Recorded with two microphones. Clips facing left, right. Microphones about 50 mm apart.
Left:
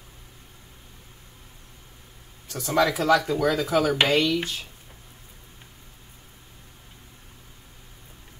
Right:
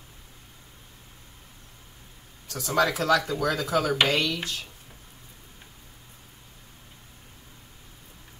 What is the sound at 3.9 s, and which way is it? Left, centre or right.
Speech, centre.